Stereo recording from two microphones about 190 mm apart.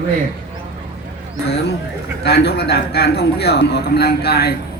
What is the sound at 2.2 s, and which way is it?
A man's voice, 60° left (ahead or behind).